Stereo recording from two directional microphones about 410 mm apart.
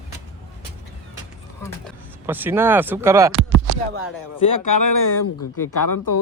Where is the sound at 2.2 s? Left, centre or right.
Centre.